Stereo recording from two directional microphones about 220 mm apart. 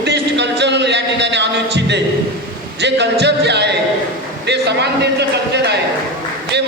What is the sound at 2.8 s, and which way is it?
A man's voice, 50° right (ahead or behind).